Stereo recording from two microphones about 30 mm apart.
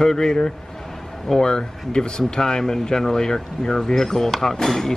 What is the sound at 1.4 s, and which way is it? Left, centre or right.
Speech, left.